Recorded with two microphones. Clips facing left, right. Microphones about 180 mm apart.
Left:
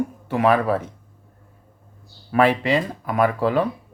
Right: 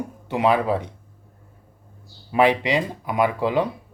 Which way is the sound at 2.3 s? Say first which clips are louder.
Left 1 dB; 15° right (ahead or behind).